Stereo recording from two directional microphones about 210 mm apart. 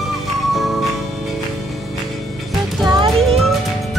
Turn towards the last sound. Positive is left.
turn(degrees=0)  # may be behind; listen again after turning